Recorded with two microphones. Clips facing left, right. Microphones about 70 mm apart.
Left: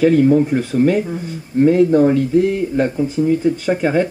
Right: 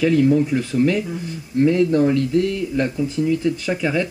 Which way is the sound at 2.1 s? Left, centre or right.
Right.